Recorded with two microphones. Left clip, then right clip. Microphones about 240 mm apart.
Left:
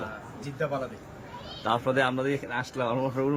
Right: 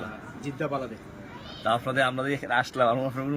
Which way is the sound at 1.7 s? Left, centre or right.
Centre.